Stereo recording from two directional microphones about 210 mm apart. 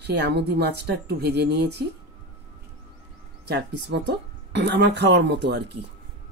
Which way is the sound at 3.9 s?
55° right (ahead or behind).